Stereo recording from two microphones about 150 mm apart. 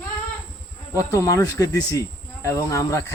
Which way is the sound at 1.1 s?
25° left (ahead or behind).